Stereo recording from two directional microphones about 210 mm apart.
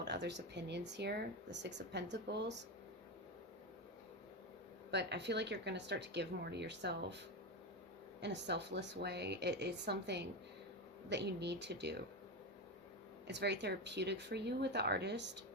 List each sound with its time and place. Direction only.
0.0 s speech: 55° right (ahead or behind)
4.9 s speech: 55° right (ahead or behind)
8.2 s speech: 55° right (ahead or behind)
13.2 s speech: 55° right (ahead or behind)